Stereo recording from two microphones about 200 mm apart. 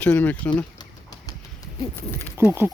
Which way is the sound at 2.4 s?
10° right (ahead or behind).